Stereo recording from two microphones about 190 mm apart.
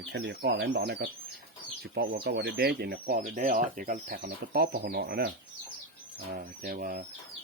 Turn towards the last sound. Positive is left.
turn(degrees=-50)  # may be behind; listen again after turning